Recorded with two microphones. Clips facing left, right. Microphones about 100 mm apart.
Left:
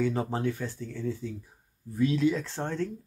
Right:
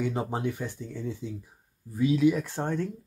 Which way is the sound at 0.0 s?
20° right (ahead or behind).